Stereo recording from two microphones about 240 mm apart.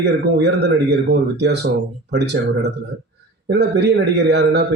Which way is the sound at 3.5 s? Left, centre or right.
Right.